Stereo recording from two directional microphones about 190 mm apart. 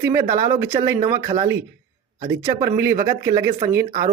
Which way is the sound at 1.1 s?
15° right (ahead or behind).